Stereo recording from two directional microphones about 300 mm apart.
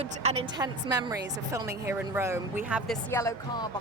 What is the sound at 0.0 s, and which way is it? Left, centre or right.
A woman's voice, right.